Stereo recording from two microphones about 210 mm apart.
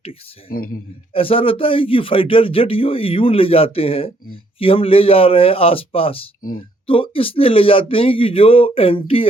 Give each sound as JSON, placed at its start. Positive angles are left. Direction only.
{"t": 0.0, "sound": "speech", "side_deg": 25}
{"t": 6.4, "sound": "speech", "side_deg": 45}
{"t": 6.8, "sound": "speech", "side_deg": 25}